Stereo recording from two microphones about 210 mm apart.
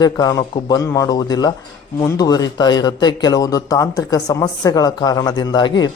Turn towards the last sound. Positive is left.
turn(degrees=20)  # may be behind; listen again after turning